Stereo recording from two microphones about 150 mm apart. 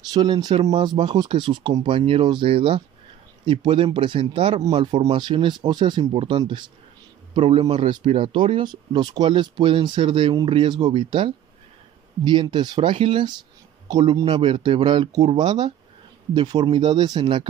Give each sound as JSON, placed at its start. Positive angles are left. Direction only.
{"t": 0.1, "sound": "speech", "side_deg": -25}
{"t": 8.2, "sound": "speech", "side_deg": -35}